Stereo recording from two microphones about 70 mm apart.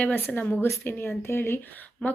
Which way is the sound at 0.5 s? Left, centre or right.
Left.